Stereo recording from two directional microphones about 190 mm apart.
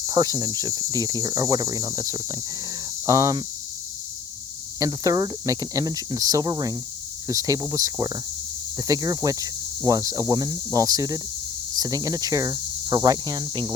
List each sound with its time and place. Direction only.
0.0 s cricket: 20° right (ahead or behind)
3.1 s speech: 15° right (ahead or behind)
4.8 s cricket: 20° right (ahead or behind)
7.3 s speech: 15° right (ahead or behind)
8.9 s cricket: 20° right (ahead or behind)